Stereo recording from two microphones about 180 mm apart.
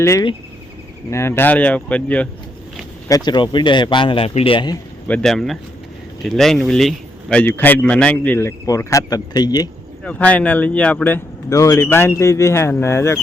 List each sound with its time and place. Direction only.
0.0 s a man's voice: 15° left (ahead or behind)
3.1 s speech: 20° left (ahead or behind)
5.0 s a man's voice: 5° left (ahead or behind); by 9.6 s 20° left (ahead or behind)
10.0 s a man's voice: 5° left (ahead or behind)